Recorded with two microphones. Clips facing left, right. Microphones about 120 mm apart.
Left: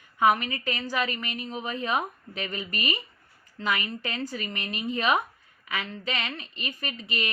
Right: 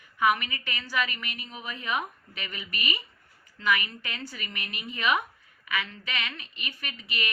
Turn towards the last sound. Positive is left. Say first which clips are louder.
# left 3 dB
turn(degrees=35)  # may be behind; listen again after turning